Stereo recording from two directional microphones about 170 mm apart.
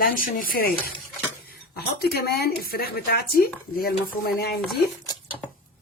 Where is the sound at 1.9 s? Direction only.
65° left (ahead or behind).